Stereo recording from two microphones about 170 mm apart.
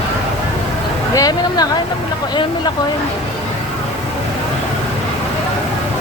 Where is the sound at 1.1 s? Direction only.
20° left (ahead or behind).